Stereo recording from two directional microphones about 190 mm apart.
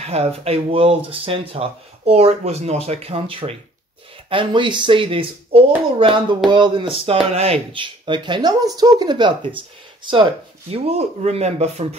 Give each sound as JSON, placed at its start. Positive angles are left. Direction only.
{"t": 0.0, "sound": "speech", "side_deg": -35}
{"t": 10.7, "sound": "speech", "side_deg": -35}